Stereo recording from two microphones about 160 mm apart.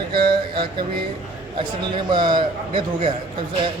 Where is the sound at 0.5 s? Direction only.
30° right (ahead or behind).